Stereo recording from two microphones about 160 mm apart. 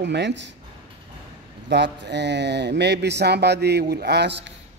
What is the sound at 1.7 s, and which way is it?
Speech, 90° right.